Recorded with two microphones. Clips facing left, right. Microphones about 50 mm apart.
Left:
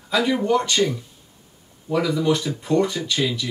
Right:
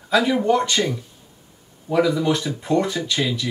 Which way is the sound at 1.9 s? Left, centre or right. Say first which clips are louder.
Right 1 dB; centre.